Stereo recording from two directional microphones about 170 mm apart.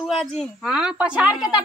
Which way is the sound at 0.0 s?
Centre (ahead or behind).